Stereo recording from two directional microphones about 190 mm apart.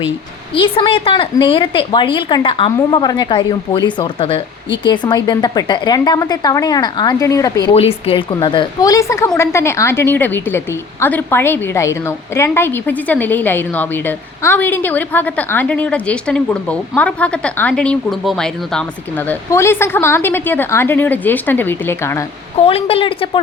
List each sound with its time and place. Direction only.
0.5 s a woman's voice: 25° left (ahead or behind)
7.7 s a woman's voice: 30° left (ahead or behind); by 22.2 s 10° left (ahead or behind)
22.5 s a woman's voice: 30° left (ahead or behind)